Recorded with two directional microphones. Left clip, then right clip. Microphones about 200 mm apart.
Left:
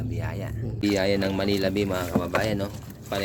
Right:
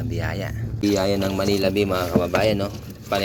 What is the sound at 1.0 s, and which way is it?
Speech, centre (ahead or behind).